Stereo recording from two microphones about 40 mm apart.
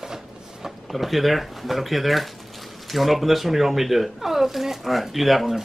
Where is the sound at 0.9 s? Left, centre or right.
Centre.